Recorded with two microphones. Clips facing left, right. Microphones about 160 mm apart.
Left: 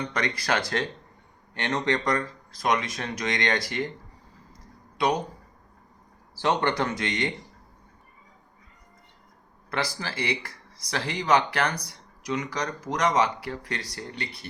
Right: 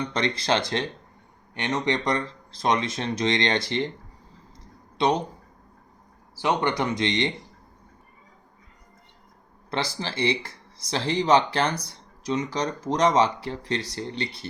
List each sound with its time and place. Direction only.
0.1 s speech: 25° right (ahead or behind)
4.9 s speech: 25° right (ahead or behind)
6.4 s speech: 15° right (ahead or behind)
9.6 s speech: 25° right (ahead or behind)